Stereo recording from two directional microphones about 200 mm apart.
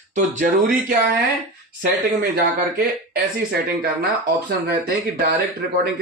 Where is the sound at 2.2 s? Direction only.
45° right (ahead or behind).